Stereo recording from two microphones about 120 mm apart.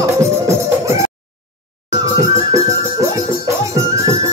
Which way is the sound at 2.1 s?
25° right (ahead or behind).